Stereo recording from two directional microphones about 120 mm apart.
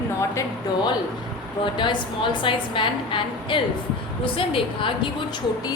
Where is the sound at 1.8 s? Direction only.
40° left (ahead or behind).